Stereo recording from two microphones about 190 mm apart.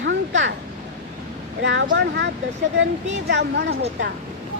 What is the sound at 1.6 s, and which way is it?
Speech, 75° right (ahead or behind).